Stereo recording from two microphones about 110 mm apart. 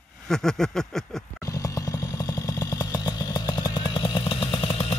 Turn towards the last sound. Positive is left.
turn(degrees=60)  # may be behind; listen again after turning